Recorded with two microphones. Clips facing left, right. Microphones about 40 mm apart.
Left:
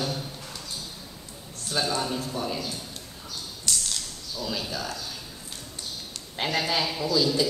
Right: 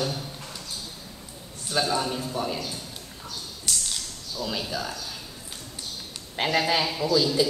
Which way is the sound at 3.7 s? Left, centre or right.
Centre.